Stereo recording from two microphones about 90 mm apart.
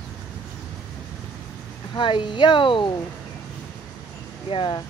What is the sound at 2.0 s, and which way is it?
Speech, 65° left (ahead or behind).